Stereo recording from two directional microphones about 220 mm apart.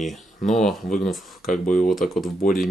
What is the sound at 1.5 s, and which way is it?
Speech, 35° left (ahead or behind).